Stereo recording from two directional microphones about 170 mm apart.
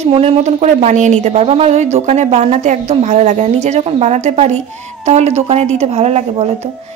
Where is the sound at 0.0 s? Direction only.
35° right (ahead or behind).